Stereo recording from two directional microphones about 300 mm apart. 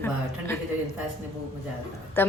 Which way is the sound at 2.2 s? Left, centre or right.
Centre.